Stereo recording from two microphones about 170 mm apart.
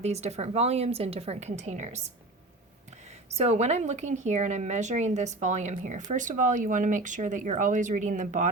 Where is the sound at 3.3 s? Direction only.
40° right (ahead or behind).